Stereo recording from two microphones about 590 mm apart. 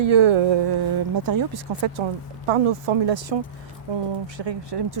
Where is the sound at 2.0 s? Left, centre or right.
Right.